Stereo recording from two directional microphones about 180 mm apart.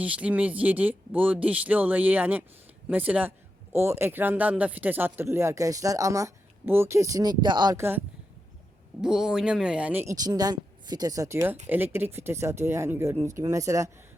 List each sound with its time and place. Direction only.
0.0 s speech: 5° right (ahead or behind)